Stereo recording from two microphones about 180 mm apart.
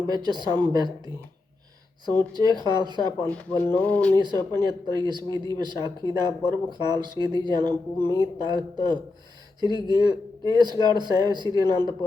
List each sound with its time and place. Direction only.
0.1 s speech: 25° right (ahead or behind)
3.7 s speech: 10° left (ahead or behind)
4.1 s speech: 25° right (ahead or behind)